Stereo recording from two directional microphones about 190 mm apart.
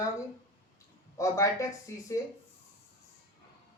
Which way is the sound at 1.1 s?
15° left (ahead or behind).